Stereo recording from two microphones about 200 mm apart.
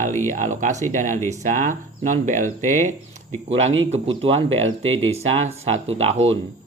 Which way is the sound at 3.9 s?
25° right (ahead or behind).